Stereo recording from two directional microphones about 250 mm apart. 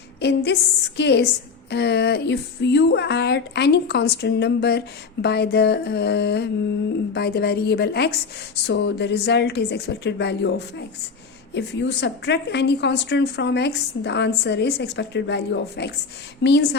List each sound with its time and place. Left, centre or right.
0.2 s a woman's voice: left